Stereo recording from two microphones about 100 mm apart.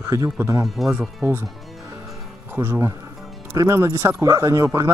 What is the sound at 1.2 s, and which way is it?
Speech, 25° right (ahead or behind).